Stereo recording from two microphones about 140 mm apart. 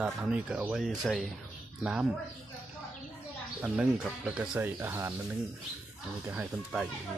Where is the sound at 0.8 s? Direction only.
5° left (ahead or behind).